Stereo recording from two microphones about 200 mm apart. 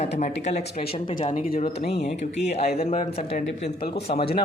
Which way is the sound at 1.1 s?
45° left (ahead or behind).